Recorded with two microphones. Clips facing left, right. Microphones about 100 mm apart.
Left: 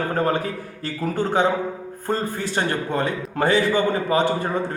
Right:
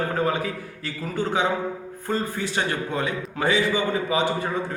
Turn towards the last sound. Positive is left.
turn(degrees=45)  # may be behind; listen again after turning